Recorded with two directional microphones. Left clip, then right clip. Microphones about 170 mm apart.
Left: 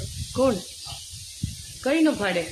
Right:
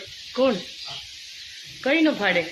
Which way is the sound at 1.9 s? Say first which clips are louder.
Right 2 dB; 10° left (ahead or behind).